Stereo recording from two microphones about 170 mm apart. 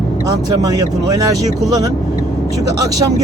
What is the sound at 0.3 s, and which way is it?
Speech, 20° right (ahead or behind).